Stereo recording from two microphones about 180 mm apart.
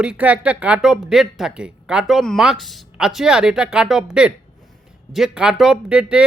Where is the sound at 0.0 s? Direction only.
5° right (ahead or behind).